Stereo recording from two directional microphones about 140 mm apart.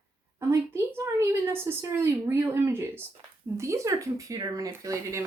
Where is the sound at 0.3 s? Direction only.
20° right (ahead or behind).